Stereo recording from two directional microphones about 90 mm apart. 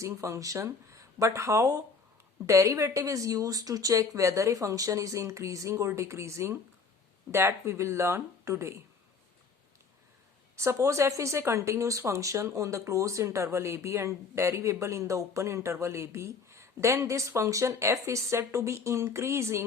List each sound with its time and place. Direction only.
0.0 s speech: 35° right (ahead or behind)
10.5 s speech: 35° right (ahead or behind)